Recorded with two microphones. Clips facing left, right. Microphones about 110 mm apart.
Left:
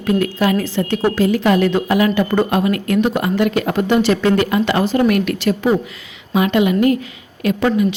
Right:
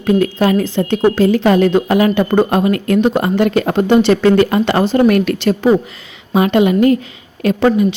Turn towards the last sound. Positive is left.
turn(degrees=-35)  # may be behind; listen again after turning